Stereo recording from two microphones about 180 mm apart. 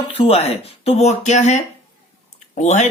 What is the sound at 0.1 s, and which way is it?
Speech, 35° left (ahead or behind).